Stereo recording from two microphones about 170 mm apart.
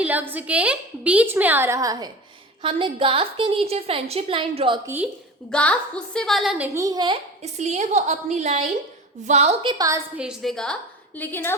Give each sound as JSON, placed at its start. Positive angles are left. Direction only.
{"t": 0.0, "sound": "a woman's voice", "side_deg": -10}
{"t": 2.6, "sound": "a woman's voice", "side_deg": -30}
{"t": 5.5, "sound": "a woman's voice", "side_deg": 5}
{"t": 6.7, "sound": "a woman's voice", "side_deg": -20}
{"t": 7.4, "sound": "a woman's voice", "side_deg": -40}
{"t": 9.7, "sound": "a woman's voice", "side_deg": -20}
{"t": 10.2, "sound": "a woman's voice", "side_deg": 0}